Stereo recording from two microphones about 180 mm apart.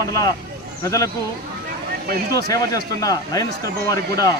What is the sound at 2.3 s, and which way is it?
Speech, 20° left (ahead or behind).